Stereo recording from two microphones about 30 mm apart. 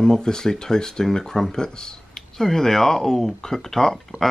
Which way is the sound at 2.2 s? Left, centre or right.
Centre.